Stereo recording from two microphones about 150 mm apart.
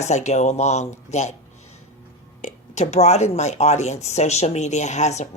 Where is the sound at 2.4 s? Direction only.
50° left (ahead or behind).